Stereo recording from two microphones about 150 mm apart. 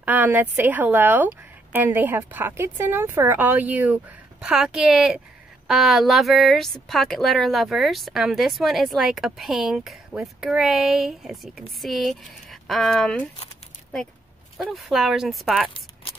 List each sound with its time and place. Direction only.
0.0 s speech: 10° right (ahead or behind); by 13.3 s 5° left (ahead or behind)
14.6 s speech: centre (ahead or behind)
15.7 s a sound: 35° left (ahead or behind)